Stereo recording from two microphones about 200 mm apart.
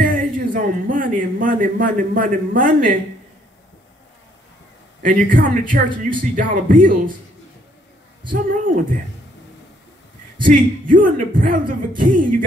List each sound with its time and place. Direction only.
0.0 s a man's voice: 45° right (ahead or behind)
5.0 s speech: 40° right (ahead or behind)
8.3 s speech: 40° right (ahead or behind)
10.4 s speech: 40° right (ahead or behind)